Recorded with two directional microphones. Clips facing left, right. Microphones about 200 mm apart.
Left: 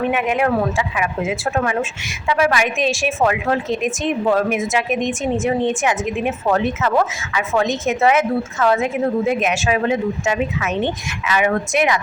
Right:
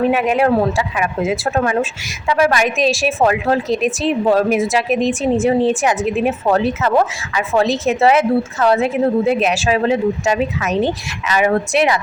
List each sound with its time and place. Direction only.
0.0 s a woman's voice: 35° right (ahead or behind)